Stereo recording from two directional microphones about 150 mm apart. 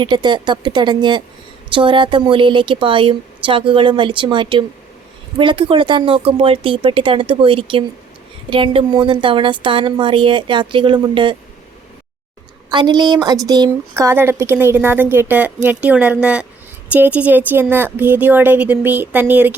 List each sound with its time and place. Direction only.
0.0 s a woman's voice: 30° right (ahead or behind)
12.7 s a woman's voice: 30° right (ahead or behind); by 19.5 s 10° right (ahead or behind)